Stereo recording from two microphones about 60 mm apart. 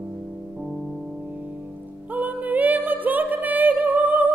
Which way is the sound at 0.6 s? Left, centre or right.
Centre.